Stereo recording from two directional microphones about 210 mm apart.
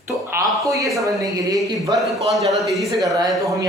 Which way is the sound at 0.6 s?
15° right (ahead or behind).